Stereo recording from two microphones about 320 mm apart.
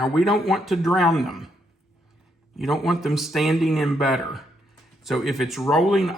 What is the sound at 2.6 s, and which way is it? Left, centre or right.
Speech, centre.